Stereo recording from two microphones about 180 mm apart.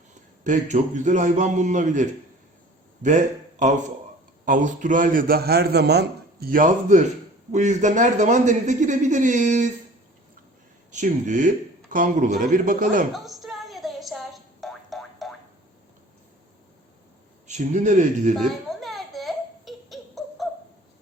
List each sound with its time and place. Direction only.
0.1 s a man's voice: 45° right (ahead or behind)
10.9 s a man's voice: 45° right (ahead or behind)
13.1 s music: centre (ahead or behind)
17.4 s a man's voice: 40° right (ahead or behind)
18.3 s a sound: centre (ahead or behind)